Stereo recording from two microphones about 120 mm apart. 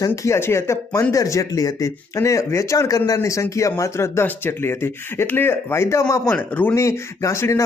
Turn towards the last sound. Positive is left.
turn(degrees=25)  # may be behind; listen again after turning